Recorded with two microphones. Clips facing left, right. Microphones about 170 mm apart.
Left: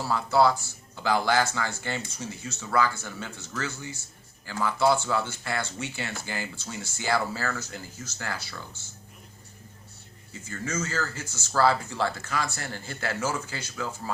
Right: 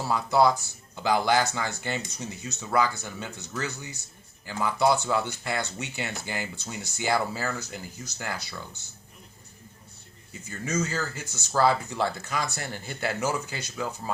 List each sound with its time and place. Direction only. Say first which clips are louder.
0.1 s speech: even; 15° right (ahead or behind)
10.4 s speech: right 3 dB; 15° right (ahead or behind)